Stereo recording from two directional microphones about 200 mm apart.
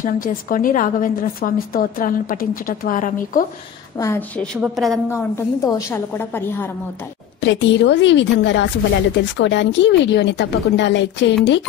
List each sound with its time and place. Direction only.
0.0 s a woman's voice: 45° left (ahead or behind)
3.9 s a woman's voice: 15° left (ahead or behind)
4.6 s a woman's voice: centre (ahead or behind)
5.1 s a woman's voice: 15° left (ahead or behind)
7.4 s a woman's voice: 65° left (ahead or behind)